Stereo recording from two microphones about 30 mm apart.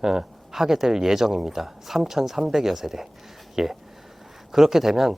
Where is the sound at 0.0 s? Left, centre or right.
Centre.